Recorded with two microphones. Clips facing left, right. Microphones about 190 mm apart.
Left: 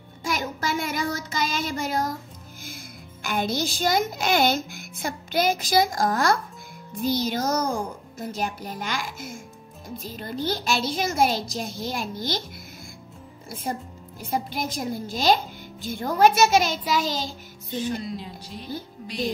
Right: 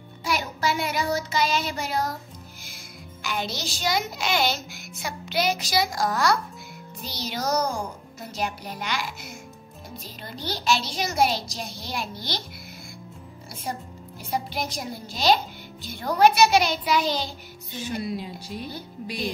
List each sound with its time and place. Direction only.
0.2 s child singing: 45° left (ahead or behind)
3.3 s a child's voice: 50° left (ahead or behind)
14.3 s a child's voice: 50° left (ahead or behind)
18.0 s speech: 10° right (ahead or behind)